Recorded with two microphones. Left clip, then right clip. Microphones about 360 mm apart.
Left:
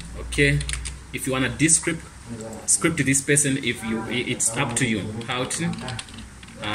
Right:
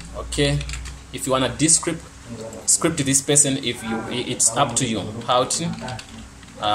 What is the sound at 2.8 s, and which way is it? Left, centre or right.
Speech, centre.